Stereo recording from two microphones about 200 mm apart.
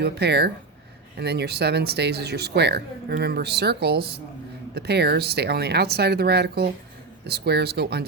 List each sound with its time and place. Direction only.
0.0 s speech: 55° right (ahead or behind)